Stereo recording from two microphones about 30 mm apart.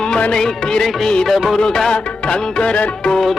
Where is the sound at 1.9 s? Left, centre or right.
Left.